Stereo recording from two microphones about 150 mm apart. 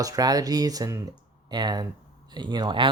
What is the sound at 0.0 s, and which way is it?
Speech, 25° right (ahead or behind).